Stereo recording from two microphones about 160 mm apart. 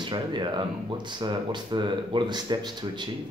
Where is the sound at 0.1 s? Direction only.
30° right (ahead or behind).